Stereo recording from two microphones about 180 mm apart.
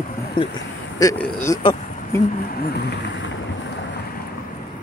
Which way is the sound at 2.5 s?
60° left (ahead or behind).